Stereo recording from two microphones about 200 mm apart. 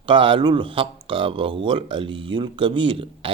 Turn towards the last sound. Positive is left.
turn(degrees=-25)  # may be behind; listen again after turning